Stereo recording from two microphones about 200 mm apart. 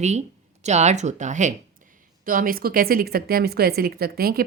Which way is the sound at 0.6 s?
35° right (ahead or behind).